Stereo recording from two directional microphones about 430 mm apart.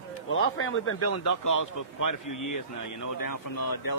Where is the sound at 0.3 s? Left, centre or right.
Left.